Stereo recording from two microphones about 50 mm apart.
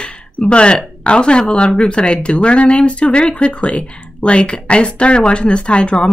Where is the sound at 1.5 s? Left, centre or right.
Centre.